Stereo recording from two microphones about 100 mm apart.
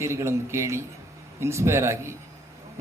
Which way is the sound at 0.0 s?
30° right (ahead or behind).